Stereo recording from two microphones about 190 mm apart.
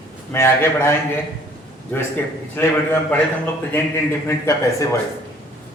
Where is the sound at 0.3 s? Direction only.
15° left (ahead or behind).